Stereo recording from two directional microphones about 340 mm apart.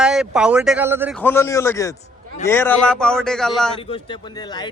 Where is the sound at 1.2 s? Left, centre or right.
Centre.